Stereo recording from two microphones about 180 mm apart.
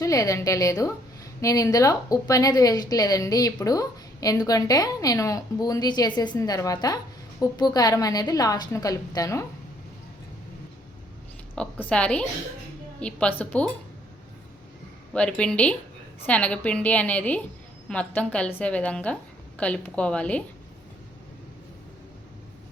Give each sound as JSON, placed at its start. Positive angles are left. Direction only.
{"t": 0.0, "sound": "a woman's voice", "side_deg": 20}
{"t": 11.5, "sound": "a woman's voice", "side_deg": 5}
{"t": 15.4, "sound": "a woman's voice", "side_deg": 5}